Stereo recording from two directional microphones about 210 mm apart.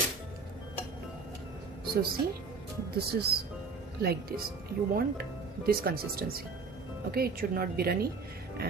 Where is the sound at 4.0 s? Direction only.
45° right (ahead or behind).